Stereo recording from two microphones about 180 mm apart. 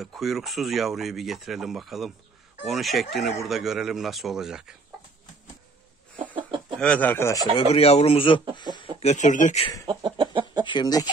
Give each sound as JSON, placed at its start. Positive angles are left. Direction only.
{"t": 0.0, "sound": "speech", "side_deg": 0}
{"t": 6.8, "sound": "speech", "side_deg": 5}
{"t": 7.5, "sound": "speech", "side_deg": 35}
{"t": 9.0, "sound": "speech", "side_deg": 40}
{"t": 9.8, "sound": "chicken", "side_deg": -25}
{"t": 10.6, "sound": "speech", "side_deg": 25}